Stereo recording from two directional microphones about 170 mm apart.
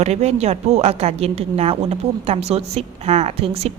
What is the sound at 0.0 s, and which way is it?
Speech, 40° right (ahead or behind).